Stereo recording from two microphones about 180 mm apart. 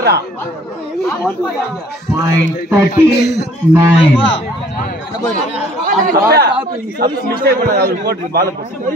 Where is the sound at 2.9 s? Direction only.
65° left (ahead or behind).